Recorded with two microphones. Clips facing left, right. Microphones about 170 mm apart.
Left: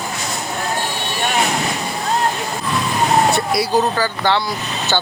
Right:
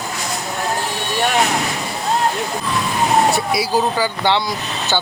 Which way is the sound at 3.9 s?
15° right (ahead or behind).